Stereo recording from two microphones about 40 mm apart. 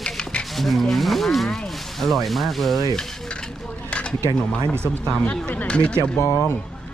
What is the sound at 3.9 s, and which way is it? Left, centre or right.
Speech, left.